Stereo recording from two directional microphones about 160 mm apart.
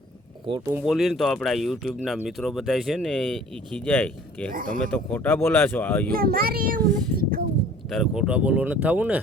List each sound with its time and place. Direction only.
0.7 s speech: 5° right (ahead or behind)
4.5 s speech: 60° right (ahead or behind)
4.9 s speech: 10° left (ahead or behind)
6.1 s a child's voice: 70° right (ahead or behind)
7.9 s speech: centre (ahead or behind)